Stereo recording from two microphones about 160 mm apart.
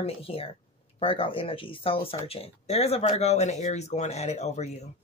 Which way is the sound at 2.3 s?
40° left (ahead or behind).